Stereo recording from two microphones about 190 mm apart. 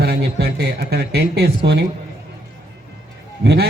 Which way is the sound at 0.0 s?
60° right (ahead or behind).